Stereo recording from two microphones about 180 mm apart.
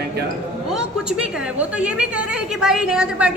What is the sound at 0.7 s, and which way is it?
A woman's voice, 5° right (ahead or behind).